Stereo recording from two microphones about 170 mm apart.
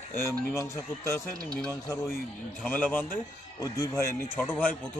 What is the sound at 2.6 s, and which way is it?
Speech, 10° left (ahead or behind).